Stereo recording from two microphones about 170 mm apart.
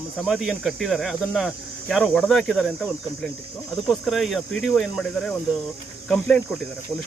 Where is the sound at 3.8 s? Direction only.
Centre (ahead or behind).